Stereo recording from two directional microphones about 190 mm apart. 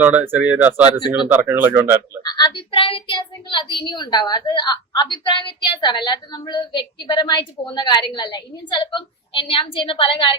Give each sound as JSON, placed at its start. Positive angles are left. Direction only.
{"t": 0.0, "sound": "speech", "side_deg": -10}
{"t": 2.2, "sound": "a woman's voice", "side_deg": 20}